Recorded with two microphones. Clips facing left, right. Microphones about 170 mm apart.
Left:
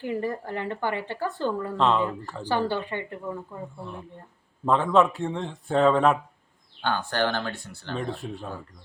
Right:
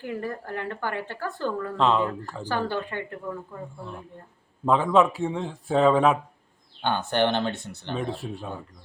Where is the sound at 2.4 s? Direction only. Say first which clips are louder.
Left 2 dB; 15° left (ahead or behind).